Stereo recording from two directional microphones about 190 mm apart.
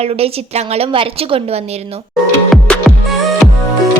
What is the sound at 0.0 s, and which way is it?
A woman's voice, 30° right (ahead or behind).